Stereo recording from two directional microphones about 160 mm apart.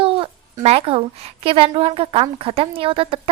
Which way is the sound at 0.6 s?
40° right (ahead or behind).